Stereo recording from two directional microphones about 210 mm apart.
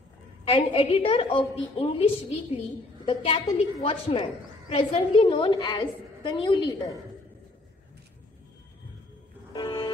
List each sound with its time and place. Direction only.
0.5 s a woman's voice: 25° left (ahead or behind)
3.1 s a woman's voice: 25° left (ahead or behind)
9.5 s a sound: 20° left (ahead or behind)